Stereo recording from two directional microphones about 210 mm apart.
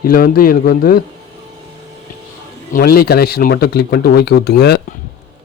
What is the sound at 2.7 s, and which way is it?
Speech, 50° left (ahead or behind).